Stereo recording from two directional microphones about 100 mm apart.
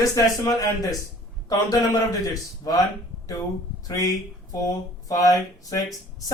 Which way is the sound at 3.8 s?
35° left (ahead or behind).